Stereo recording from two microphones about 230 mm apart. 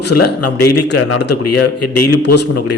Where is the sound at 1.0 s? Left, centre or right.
Left.